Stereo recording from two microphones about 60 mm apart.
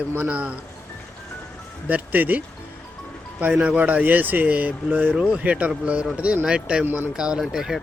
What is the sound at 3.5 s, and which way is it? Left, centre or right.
A man's voice, right.